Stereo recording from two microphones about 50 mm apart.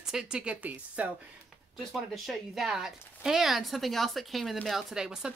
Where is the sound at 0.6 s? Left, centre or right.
Right.